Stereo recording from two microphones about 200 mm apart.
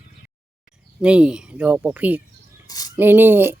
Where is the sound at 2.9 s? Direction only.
10° right (ahead or behind).